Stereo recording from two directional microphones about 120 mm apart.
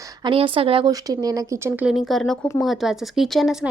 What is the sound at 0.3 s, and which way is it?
Speech, 50° right (ahead or behind).